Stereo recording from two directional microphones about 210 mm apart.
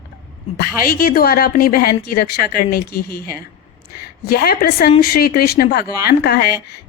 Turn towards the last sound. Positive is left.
turn(degrees=45)  # may be behind; listen again after turning